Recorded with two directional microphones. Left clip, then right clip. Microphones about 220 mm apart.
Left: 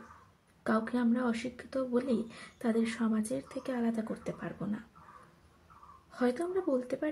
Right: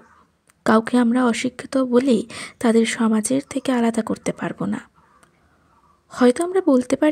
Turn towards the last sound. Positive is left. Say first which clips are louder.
# right 14 dB
turn(degrees=-45)  # may be behind; listen again after turning